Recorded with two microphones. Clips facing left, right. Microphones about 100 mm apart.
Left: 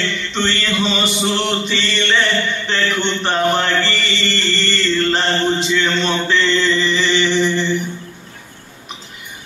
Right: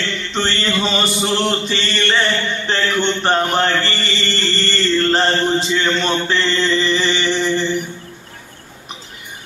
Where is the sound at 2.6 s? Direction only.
40° right (ahead or behind).